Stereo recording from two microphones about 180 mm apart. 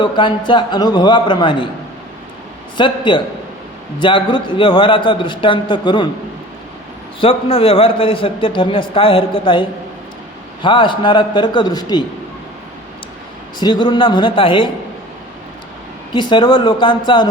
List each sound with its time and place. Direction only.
0.0 s a man's voice: 25° left (ahead or behind)
2.7 s a man's voice: 25° left (ahead or behind)
7.2 s a man's voice: 30° left (ahead or behind)
13.6 s a man's voice: 25° left (ahead or behind)
16.1 s a man's voice: 25° left (ahead or behind)